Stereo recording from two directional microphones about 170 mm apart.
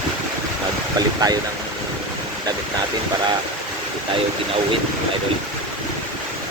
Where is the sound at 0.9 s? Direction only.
20° right (ahead or behind).